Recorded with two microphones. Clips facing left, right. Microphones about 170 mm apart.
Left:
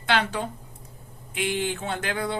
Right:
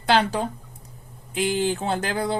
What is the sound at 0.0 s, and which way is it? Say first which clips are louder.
Speech: right 4 dB; 35° right (ahead or behind).